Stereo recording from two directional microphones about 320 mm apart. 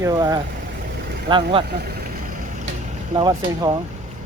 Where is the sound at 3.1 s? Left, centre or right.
Centre.